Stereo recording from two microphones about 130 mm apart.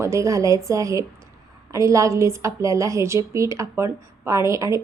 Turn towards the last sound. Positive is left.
turn(degrees=-25)  # may be behind; listen again after turning